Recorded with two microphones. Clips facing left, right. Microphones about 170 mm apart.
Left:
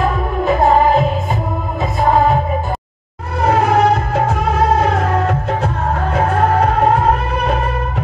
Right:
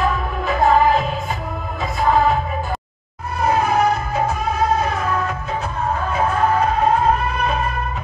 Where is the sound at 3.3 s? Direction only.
75° left (ahead or behind).